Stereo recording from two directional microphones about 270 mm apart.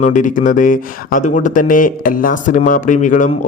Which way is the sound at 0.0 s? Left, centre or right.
Left.